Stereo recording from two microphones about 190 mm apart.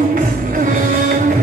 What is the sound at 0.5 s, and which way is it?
Music, 45° right (ahead or behind).